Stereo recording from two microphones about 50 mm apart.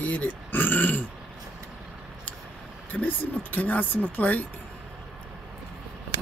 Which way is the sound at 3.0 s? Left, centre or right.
Left.